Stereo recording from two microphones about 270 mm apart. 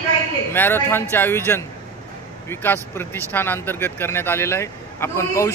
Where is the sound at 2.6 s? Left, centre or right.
Centre.